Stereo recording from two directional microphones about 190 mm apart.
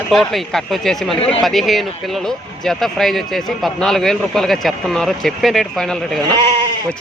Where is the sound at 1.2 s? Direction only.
30° left (ahead or behind).